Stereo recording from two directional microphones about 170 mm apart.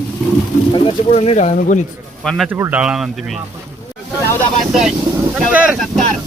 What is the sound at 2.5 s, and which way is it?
Speech, 10° right (ahead or behind).